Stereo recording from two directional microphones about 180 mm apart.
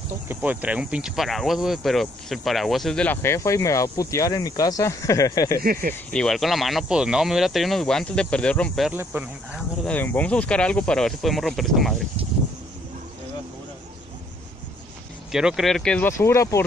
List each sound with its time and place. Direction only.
0.3 s speech: 10° right (ahead or behind); by 5.6 s 20° left (ahead or behind)
5.6 s speech: 55° right (ahead or behind)
6.1 s speech: centre (ahead or behind)
8.9 s speech: 10° right (ahead or behind)
9.8 s speech: 10° left (ahead or behind)
15.3 s speech: 5° right (ahead or behind); by 16.6 s 15° left (ahead or behind)